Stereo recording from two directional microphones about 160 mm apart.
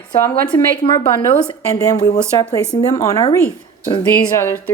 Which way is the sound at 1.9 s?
25° left (ahead or behind).